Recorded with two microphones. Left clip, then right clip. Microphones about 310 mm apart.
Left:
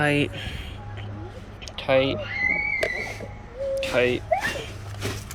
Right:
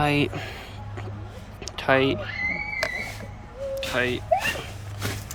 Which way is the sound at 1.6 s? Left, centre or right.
Centre.